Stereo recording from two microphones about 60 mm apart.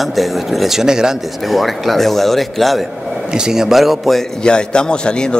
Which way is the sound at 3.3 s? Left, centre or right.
Centre.